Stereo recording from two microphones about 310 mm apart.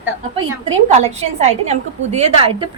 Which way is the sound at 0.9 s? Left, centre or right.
Right.